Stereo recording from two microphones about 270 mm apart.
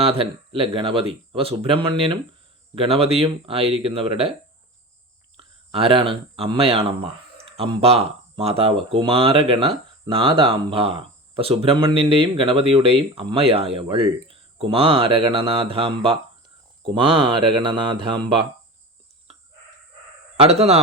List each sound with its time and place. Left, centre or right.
0.0 s speech: right
5.4 s speech: right
20.3 s speech: right